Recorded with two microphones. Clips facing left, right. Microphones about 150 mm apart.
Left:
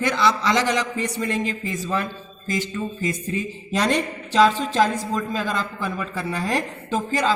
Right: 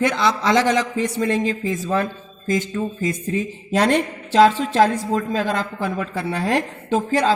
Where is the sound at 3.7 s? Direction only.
55° right (ahead or behind).